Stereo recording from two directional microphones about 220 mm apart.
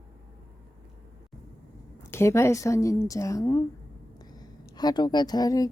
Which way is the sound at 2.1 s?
10° left (ahead or behind).